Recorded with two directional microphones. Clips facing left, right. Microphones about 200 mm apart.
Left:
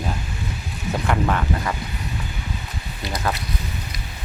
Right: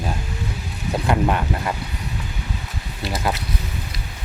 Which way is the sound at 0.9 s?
15° right (ahead or behind).